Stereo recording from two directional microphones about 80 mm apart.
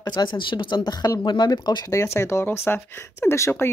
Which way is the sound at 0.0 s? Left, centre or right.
Left.